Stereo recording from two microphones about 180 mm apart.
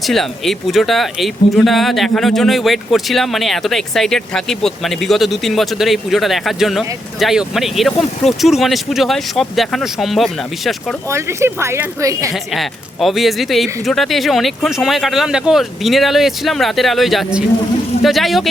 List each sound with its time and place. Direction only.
0.0 s speech: centre (ahead or behind)
11.1 s speech: 15° right (ahead or behind)
12.3 s speech: centre (ahead or behind)